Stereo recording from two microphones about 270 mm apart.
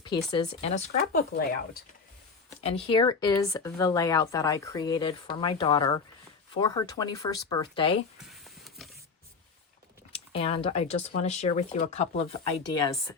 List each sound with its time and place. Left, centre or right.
0.3 s speech: left
2.6 s speech: left
8.3 s a sound: centre
10.3 s speech: left